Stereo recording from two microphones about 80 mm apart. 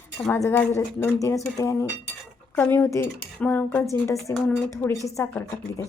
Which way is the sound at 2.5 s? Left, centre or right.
Left.